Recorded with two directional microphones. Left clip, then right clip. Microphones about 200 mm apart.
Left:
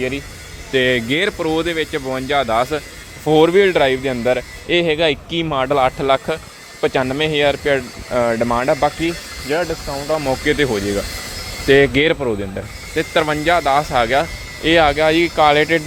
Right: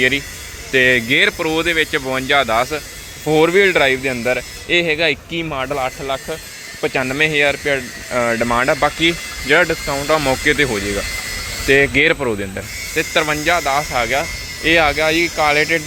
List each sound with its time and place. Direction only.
0.7 s speech: 10° left (ahead or behind); by 6.4 s 30° left (ahead or behind)
6.8 s speech: 15° left (ahead or behind); by 10.2 s 15° right (ahead or behind)
10.4 s speech: 10° left (ahead or behind)
12.2 s speech: 5° left (ahead or behind)